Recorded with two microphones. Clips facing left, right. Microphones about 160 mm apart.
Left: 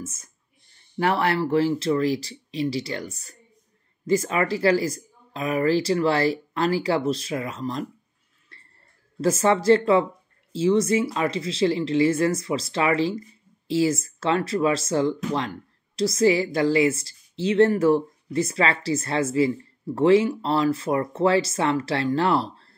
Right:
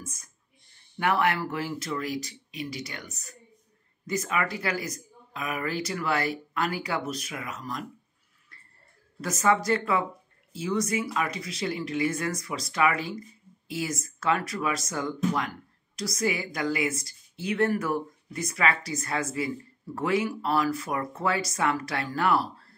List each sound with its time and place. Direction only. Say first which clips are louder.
0.0 s a woman's voice: left 7 dB; 25° left (ahead or behind)
8.5 s a sound: left 4 dB; 30° left (ahead or behind)
9.2 s a woman's voice: left 5 dB; 30° left (ahead or behind)